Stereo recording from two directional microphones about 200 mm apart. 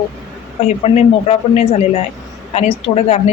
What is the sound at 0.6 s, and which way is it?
Speech, 30° left (ahead or behind).